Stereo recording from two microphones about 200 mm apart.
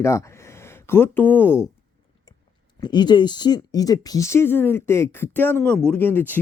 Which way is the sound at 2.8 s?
20° left (ahead or behind).